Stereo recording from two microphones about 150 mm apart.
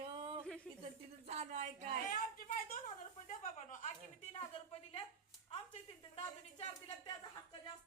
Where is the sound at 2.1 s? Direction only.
60° left (ahead or behind).